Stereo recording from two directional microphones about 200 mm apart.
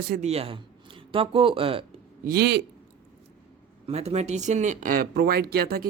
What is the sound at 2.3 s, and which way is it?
Speech, 55° right (ahead or behind).